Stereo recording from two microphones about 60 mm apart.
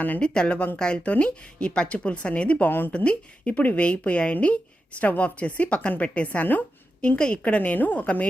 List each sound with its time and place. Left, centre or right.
0.2 s speech: centre